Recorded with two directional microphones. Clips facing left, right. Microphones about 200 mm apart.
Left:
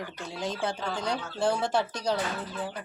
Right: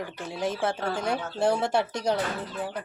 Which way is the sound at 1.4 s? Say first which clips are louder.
Right 2 dB; 20° right (ahead or behind).